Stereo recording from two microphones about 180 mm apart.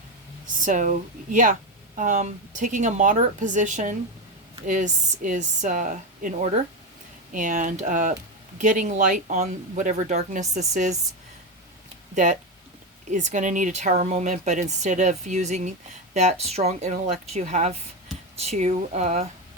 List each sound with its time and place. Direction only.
0.6 s speech: 45° right (ahead or behind)
12.1 s speech: 45° right (ahead or behind)